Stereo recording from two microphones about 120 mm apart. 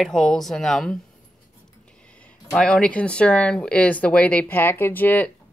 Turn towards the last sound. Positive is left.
turn(degrees=15)  # may be behind; listen again after turning